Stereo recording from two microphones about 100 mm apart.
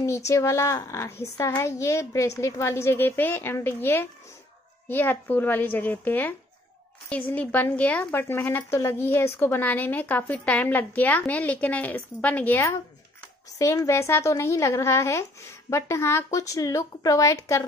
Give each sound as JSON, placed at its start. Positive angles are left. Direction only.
{"t": 0.3, "sound": "a woman's voice", "side_deg": 30}